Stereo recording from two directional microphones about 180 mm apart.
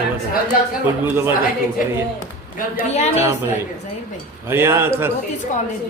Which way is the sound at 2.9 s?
40° left (ahead or behind).